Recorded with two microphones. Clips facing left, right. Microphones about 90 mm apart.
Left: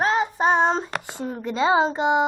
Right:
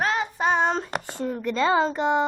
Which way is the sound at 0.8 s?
15° left (ahead or behind).